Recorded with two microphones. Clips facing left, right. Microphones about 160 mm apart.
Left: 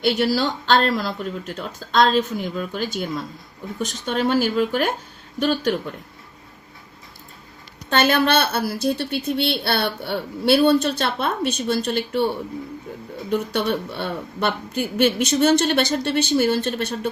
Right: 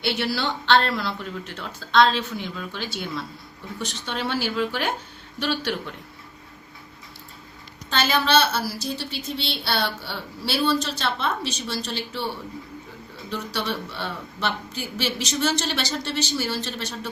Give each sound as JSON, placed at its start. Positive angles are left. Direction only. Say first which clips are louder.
{"t": 0.0, "sound": "speech", "louder": "left 6 dB", "side_deg": 45}
{"t": 7.9, "sound": "a woman's voice", "louder": "left 5 dB", "side_deg": 60}
{"t": 13.3, "sound": "a woman's voice", "louder": "left 7 dB", "side_deg": 55}